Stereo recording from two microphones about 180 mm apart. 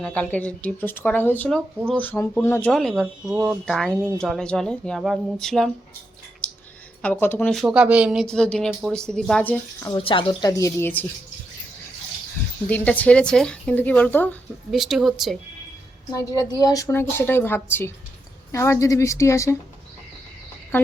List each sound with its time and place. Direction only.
0.0 s a woman's voice: 10° left (ahead or behind)
7.0 s speech: 10° left (ahead or behind)
9.9 s a woman's voice: 30° left (ahead or behind); by 11.0 s 10° left (ahead or behind)
12.6 s a woman's voice: 10° left (ahead or behind)
14.7 s speech: centre (ahead or behind)
16.1 s a woman's voice: 20° left (ahead or behind)
20.7 s speech: 10° left (ahead or behind)